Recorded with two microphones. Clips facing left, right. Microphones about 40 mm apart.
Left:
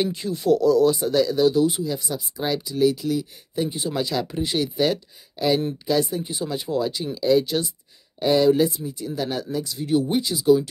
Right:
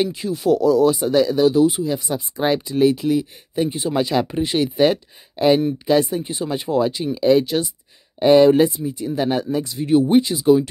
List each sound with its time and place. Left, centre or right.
0.0 s speech: centre
2.1 s speech: right
6.0 s speech: centre
7.4 s speech: centre
8.2 s speech: right